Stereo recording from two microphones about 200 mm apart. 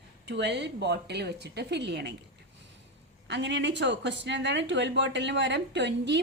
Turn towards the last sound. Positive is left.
turn(degrees=-60)  # may be behind; listen again after turning